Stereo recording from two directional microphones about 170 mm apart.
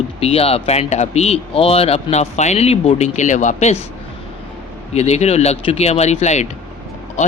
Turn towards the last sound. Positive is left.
turn(degrees=40)  # may be behind; listen again after turning